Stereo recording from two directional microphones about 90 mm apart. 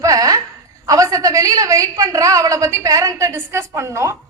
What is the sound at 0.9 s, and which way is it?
A woman's voice, 40° right (ahead or behind).